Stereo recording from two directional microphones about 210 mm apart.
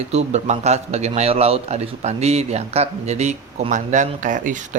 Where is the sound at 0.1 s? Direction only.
30° right (ahead or behind).